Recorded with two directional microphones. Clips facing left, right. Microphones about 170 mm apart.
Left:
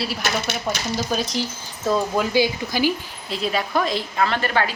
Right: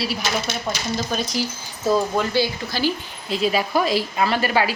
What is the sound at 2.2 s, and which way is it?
Speech, 15° left (ahead or behind).